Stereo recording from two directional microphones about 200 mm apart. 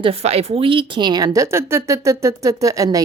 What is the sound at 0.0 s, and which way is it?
A woman's voice, 30° right (ahead or behind).